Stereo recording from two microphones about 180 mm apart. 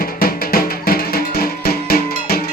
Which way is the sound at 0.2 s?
55° left (ahead or behind).